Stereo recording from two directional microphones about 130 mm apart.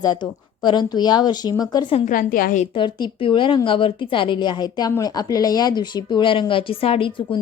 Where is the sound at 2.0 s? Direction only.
90° left.